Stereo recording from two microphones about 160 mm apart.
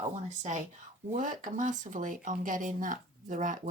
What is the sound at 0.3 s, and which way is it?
Speech, 50° right (ahead or behind).